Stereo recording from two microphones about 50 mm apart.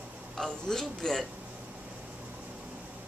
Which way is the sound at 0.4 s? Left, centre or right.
Centre.